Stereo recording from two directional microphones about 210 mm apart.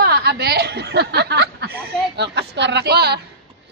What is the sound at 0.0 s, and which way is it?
Speech, 50° right (ahead or behind).